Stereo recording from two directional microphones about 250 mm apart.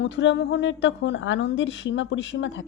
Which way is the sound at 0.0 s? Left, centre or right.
Left.